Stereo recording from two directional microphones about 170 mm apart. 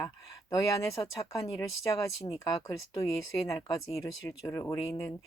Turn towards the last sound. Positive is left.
turn(degrees=20)  # may be behind; listen again after turning